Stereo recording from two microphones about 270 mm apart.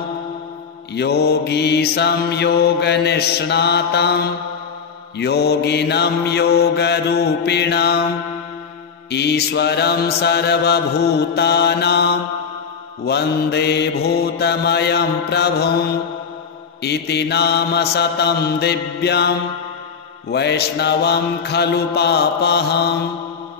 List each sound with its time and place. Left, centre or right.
0.9 s mantra: left
9.1 s mantra: left
16.8 s mantra: left